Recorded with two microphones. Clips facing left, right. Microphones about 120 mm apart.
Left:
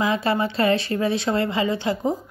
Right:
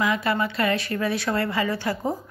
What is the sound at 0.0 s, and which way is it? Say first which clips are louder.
A woman's voice: left 2 dB; 30° left (ahead or behind).